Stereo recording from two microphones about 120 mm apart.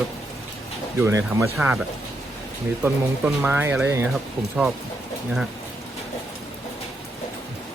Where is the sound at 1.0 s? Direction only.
25° right (ahead or behind).